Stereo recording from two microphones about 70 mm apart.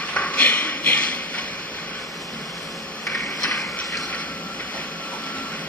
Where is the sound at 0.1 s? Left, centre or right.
Left.